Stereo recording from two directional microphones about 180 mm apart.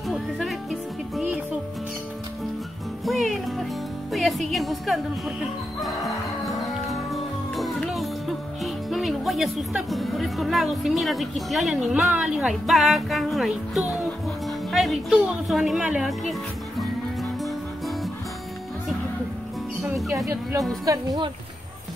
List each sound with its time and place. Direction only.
0.1 s music: centre (ahead or behind)
3.1 s music: centre (ahead or behind)
4.1 s speech: centre (ahead or behind)
5.8 s music: centre (ahead or behind)
8.6 s speech: centre (ahead or behind)
17.2 s music: centre (ahead or behind)
20.8 s speech: 20° right (ahead or behind)